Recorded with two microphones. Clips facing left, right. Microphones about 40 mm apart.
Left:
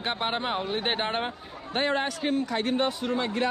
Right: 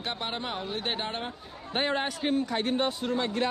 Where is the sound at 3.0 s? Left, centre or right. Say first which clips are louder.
Left 1 dB; left.